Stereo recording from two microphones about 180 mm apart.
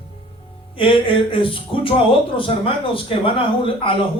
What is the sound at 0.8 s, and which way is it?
Speech, 30° left (ahead or behind).